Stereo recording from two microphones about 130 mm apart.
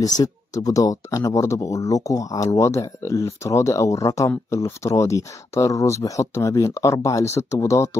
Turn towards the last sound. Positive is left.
turn(degrees=20)  # may be behind; listen again after turning